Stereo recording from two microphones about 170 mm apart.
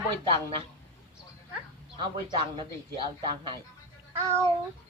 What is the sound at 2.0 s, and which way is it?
A man's voice, 30° right (ahead or behind).